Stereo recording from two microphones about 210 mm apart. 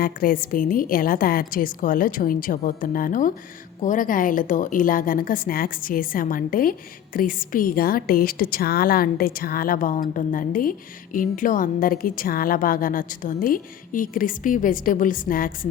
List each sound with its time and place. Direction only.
0.0 s a woman's voice: 45° left (ahead or behind)